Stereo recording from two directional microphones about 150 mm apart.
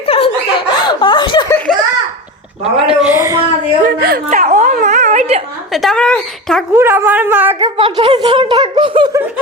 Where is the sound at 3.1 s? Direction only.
20° right (ahead or behind).